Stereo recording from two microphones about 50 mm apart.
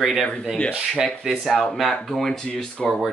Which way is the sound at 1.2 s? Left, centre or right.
Centre.